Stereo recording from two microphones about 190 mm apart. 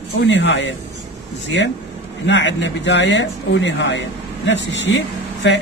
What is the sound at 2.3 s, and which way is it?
A man's voice, 70° left (ahead or behind).